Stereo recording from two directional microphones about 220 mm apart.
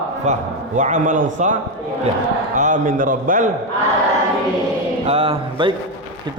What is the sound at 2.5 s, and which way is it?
Speech, 35° right (ahead or behind).